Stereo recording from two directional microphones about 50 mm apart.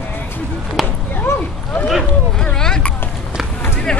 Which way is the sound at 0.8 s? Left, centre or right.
Centre.